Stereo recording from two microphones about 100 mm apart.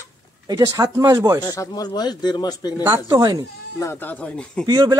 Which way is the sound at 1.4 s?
40° left (ahead or behind).